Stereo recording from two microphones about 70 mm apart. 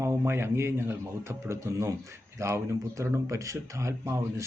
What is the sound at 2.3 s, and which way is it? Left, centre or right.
Speech, right.